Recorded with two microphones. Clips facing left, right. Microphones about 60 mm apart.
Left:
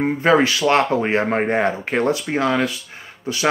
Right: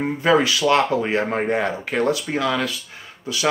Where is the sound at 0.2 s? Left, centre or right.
Left.